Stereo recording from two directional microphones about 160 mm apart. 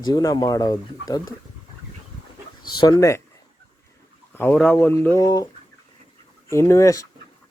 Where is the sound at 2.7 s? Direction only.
25° left (ahead or behind).